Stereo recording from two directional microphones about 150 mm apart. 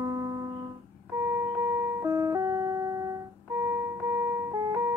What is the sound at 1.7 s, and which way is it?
Music, 20° right (ahead or behind).